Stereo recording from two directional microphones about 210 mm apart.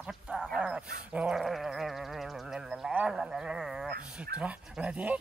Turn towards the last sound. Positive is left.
turn(degrees=-5)  # may be behind; listen again after turning